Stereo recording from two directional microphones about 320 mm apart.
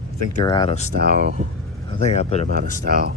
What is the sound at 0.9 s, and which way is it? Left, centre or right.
Speech, right.